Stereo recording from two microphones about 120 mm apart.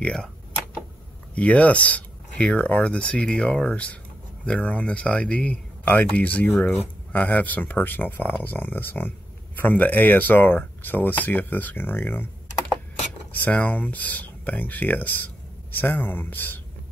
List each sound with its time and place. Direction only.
0.0 s speech: 5° left (ahead or behind)
1.3 s speech: 10° left (ahead or behind)
13.3 s speech: 15° left (ahead or behind)